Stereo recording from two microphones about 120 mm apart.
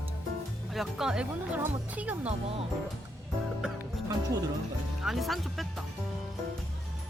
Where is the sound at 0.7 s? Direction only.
5° right (ahead or behind).